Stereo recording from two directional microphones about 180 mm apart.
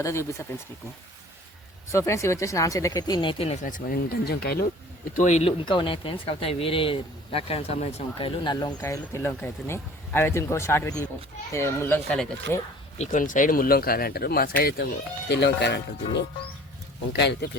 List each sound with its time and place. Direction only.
0.0 s speech: 15° left (ahead or behind)
1.9 s speech: 15° left (ahead or behind); by 3.6 s 30° left (ahead or behind)
3.6 s speech: 50° left (ahead or behind)
5.1 s speech: 40° left (ahead or behind)
8.4 s speech: 20° left (ahead or behind); by 12.3 s 5° left (ahead or behind)
13.0 s speech: 45° left (ahead or behind); by 14.8 s 60° left (ahead or behind)
15.3 s speech: 70° left (ahead or behind)